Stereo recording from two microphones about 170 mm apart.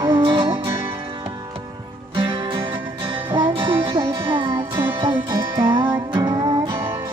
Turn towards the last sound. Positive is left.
turn(degrees=-30)  # may be behind; listen again after turning